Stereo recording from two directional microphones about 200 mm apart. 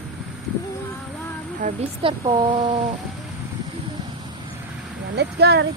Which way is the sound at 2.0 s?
25° right (ahead or behind).